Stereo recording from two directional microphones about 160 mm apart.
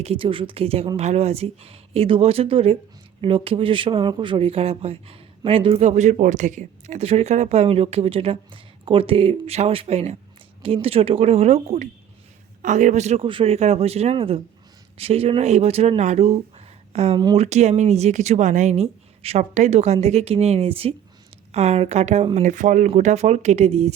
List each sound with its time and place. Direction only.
0.0 s speech: 35° right (ahead or behind)